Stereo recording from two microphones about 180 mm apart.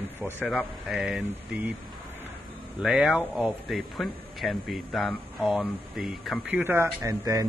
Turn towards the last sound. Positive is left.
turn(degrees=-15)  # may be behind; listen again after turning